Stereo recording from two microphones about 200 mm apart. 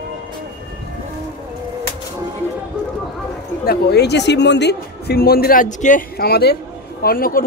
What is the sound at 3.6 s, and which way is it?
A woman's voice, 50° left (ahead or behind).